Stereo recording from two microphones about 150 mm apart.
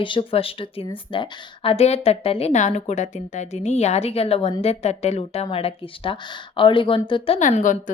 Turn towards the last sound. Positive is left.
turn(degrees=60)  # may be behind; listen again after turning